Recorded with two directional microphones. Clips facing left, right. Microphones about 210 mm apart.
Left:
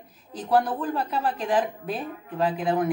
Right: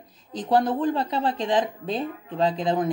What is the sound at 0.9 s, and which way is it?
Speech, 25° right (ahead or behind).